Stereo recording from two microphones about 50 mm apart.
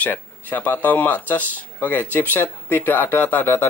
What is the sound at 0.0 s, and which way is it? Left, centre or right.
Speech, left.